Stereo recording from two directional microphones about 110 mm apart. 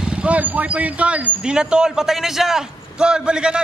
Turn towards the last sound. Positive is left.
turn(degrees=-10)  # may be behind; listen again after turning